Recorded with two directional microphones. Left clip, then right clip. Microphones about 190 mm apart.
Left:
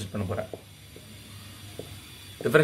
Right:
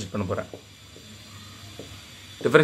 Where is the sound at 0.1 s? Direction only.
20° right (ahead or behind).